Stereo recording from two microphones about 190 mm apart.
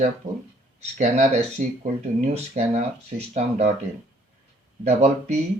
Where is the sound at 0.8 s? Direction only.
40° right (ahead or behind).